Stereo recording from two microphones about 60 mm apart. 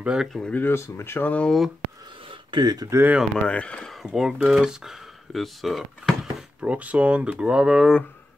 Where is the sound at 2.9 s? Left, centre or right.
Right.